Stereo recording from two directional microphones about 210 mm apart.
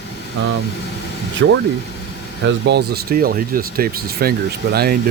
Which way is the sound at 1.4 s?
60° right (ahead or behind).